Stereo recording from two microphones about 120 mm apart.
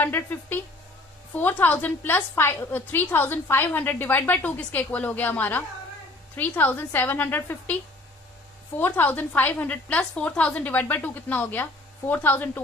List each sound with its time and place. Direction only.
0.0 s a woman's voice: 15° left (ahead or behind)
8.8 s a woman's voice: 15° left (ahead or behind)